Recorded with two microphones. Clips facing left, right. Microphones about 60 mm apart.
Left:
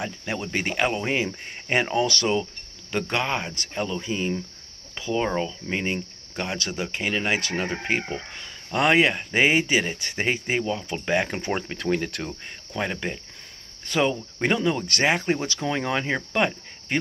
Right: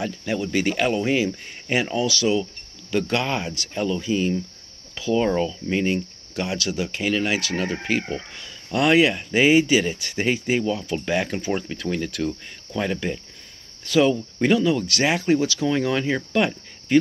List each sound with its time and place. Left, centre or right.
0.0 s speech: left
2.9 s speech: left
11.4 s speech: left
12.3 s speech: left